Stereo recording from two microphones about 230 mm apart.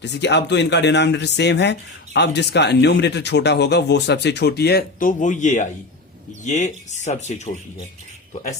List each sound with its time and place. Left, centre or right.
0.0 s speech: left